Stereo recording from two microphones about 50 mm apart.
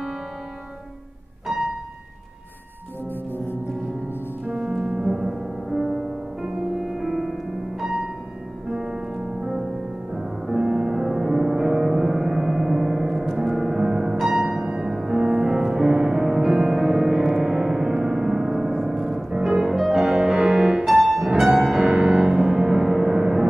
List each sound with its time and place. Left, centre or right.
1.5 s music: centre
4.6 s music: centre
8.6 s music: centre
13.4 s gong: centre
14.1 s music: centre
15.3 s music: right
15.6 s music: centre